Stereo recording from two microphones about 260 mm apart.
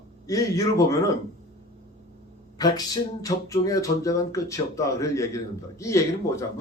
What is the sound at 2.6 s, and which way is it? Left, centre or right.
Speech, centre.